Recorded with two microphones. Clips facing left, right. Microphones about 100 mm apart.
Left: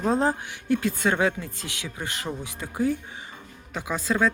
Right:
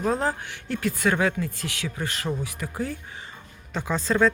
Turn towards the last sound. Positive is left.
turn(degrees=5)  # may be behind; listen again after turning